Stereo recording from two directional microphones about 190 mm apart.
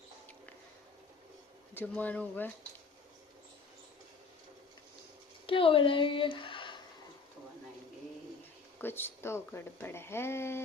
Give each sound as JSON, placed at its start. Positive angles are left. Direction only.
{"t": 1.7, "sound": "speech", "side_deg": 10}
{"t": 5.5, "sound": "a woman's voice", "side_deg": 30}
{"t": 8.8, "sound": "speech", "side_deg": 10}